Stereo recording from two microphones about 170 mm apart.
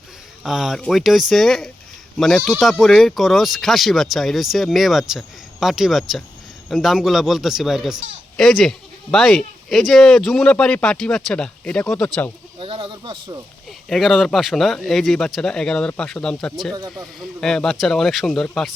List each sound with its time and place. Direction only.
0.4 s speech: centre (ahead or behind)
12.5 s speech: 30° right (ahead or behind)
13.7 s speech: centre (ahead or behind)